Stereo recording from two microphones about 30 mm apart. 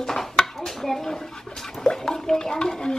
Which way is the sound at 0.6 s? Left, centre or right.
Centre.